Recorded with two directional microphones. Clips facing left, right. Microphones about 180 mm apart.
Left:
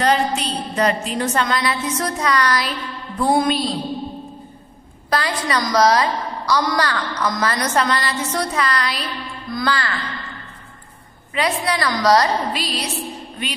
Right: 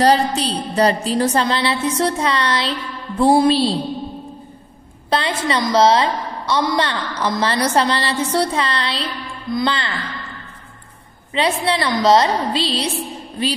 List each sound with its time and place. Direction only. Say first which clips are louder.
0.0 s a woman's voice: right 3 dB; 35° right (ahead or behind)
5.1 s a woman's voice: right 2 dB; 25° right (ahead or behind)
11.3 s a woman's voice: right 2 dB; 25° right (ahead or behind)